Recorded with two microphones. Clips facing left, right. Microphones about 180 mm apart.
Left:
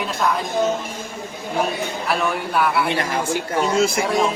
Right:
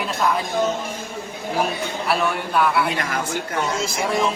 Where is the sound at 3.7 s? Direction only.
60° left (ahead or behind).